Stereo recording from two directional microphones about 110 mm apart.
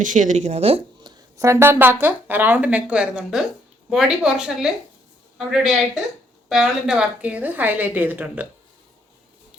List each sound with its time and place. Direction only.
0.3 s a woman's voice: 80° right
1.1 s a sound: 45° right (ahead or behind)
1.4 s a woman's voice: 25° right (ahead or behind)